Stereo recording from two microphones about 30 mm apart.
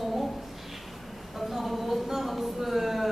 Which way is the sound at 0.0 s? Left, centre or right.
Centre.